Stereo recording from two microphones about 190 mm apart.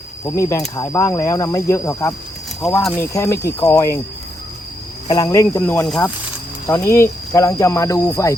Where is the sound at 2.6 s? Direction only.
5° left (ahead or behind).